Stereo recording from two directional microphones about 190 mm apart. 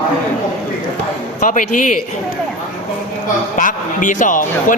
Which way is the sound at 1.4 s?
40° left (ahead or behind).